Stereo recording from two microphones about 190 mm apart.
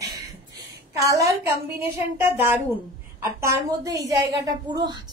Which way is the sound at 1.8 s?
10° right (ahead or behind).